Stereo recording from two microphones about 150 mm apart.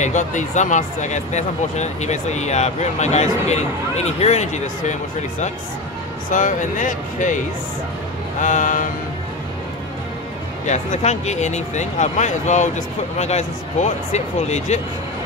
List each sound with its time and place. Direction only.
0.0 s speech: 55° left (ahead or behind)
6.3 s speech: 60° left (ahead or behind)
10.7 s speech: 50° left (ahead or behind)